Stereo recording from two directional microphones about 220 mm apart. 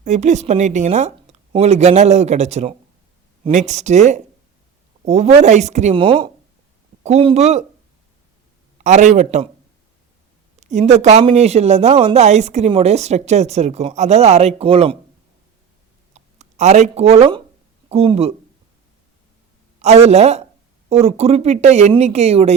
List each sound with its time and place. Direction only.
0.0 s speech: 30° right (ahead or behind)
8.8 s speech: 35° right (ahead or behind)
10.6 s speech: 30° right (ahead or behind)
16.1 s speech: 30° right (ahead or behind)
19.8 s speech: 30° right (ahead or behind)